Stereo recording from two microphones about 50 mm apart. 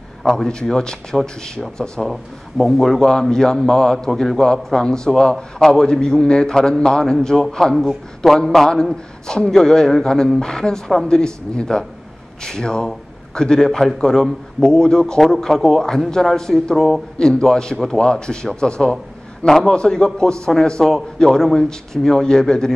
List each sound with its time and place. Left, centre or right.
0.2 s a man's voice: centre
7.7 s speech: centre
8.4 s a man's voice: centre
17.2 s a man's voice: centre
19.4 s a man's voice: centre